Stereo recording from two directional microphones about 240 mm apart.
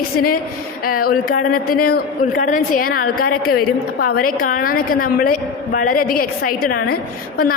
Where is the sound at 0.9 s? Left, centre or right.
Left.